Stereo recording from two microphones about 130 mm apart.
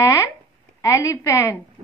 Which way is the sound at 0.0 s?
25° left (ahead or behind).